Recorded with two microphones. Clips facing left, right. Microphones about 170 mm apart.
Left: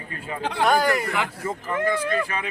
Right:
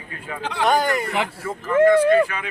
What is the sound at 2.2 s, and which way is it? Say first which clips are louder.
Speech: left 1 dB; 35° left (ahead or behind).